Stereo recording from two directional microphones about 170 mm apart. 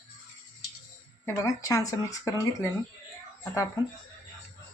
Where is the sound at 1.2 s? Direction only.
20° left (ahead or behind).